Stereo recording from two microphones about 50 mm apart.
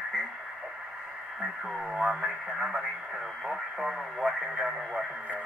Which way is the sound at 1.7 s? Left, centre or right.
Centre.